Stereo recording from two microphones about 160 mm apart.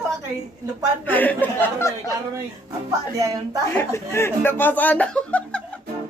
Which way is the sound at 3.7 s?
15° left (ahead or behind).